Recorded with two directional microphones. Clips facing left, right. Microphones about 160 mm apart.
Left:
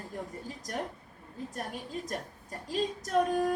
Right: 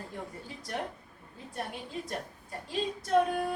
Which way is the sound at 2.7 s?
45° left (ahead or behind).